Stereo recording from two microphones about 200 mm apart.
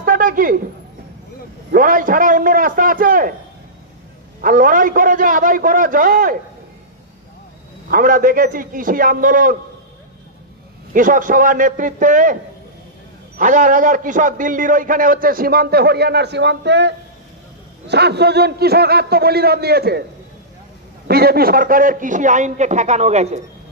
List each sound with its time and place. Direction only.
0.0 s a sound: 45° right (ahead or behind)
1.7 s a man's voice: 45° right (ahead or behind)
4.4 s a man's voice: 45° right (ahead or behind)
7.9 s a man's voice: 45° right (ahead or behind)
10.9 s a man's voice: 40° right (ahead or behind)
13.4 s a man's voice: 40° right (ahead or behind)
21.1 s a man's voice: 50° right (ahead or behind); by 23.4 s 35° right (ahead or behind)